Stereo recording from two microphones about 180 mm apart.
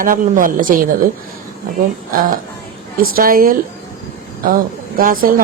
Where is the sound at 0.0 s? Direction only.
50° right (ahead or behind).